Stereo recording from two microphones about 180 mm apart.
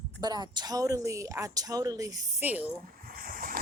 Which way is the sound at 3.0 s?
55° right (ahead or behind).